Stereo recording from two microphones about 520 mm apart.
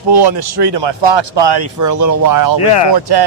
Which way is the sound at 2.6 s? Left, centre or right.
Left.